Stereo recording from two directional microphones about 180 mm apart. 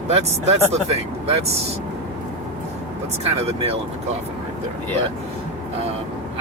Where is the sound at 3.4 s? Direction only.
35° right (ahead or behind).